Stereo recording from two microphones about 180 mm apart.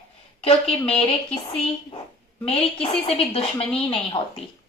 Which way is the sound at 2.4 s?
30° left (ahead or behind).